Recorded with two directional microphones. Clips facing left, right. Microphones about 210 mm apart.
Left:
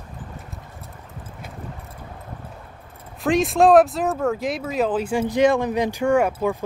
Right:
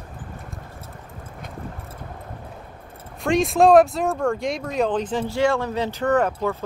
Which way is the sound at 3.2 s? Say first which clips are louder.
Even; centre (ahead or behind).